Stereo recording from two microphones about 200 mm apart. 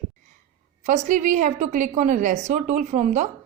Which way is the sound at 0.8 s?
35° right (ahead or behind).